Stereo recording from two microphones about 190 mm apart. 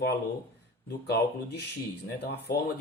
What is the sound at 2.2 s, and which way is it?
Speech, 60° left (ahead or behind).